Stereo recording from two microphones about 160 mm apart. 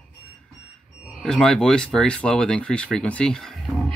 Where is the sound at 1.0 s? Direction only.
Centre (ahead or behind).